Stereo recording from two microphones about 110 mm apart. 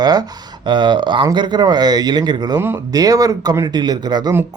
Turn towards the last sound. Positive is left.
turn(degrees=-40)  # may be behind; listen again after turning